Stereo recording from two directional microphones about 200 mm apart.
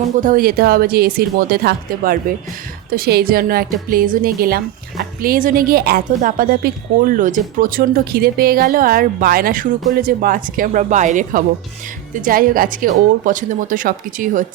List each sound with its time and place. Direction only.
0.2 s a woman's voice: 45° right (ahead or behind)